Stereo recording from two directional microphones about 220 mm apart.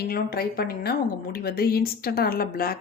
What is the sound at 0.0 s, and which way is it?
A woman's voice, 45° left (ahead or behind).